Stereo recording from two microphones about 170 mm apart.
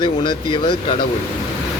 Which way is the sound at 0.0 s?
30° left (ahead or behind).